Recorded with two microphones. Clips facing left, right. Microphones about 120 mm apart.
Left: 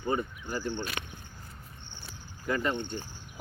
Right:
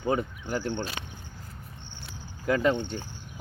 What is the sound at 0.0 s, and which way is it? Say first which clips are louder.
Speech: right 3 dB; 90° right.